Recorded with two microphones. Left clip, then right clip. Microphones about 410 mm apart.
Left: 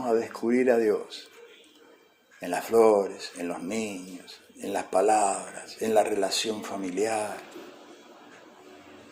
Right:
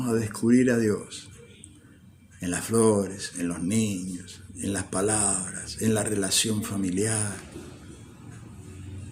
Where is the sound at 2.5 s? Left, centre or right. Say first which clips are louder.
Left 3 dB; right.